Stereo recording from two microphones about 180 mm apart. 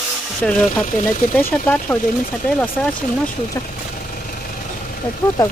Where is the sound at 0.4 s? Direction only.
5° left (ahead or behind).